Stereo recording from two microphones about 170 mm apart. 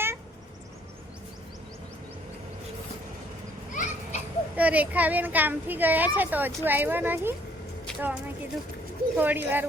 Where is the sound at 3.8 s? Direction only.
50° left (ahead or behind).